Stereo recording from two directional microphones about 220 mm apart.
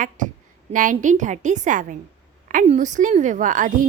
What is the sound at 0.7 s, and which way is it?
Speech, 35° right (ahead or behind).